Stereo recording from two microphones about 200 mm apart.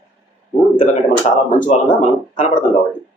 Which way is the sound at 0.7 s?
40° left (ahead or behind).